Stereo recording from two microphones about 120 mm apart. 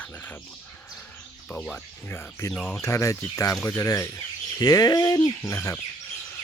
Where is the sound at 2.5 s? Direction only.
5° left (ahead or behind).